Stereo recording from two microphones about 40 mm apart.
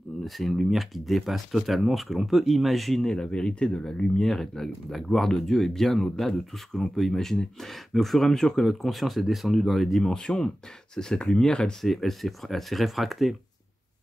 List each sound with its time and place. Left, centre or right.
0.2 s speech: centre
3.1 s speech: centre
4.2 s speech: centre
10.1 s speech: centre
11.8 s speech: centre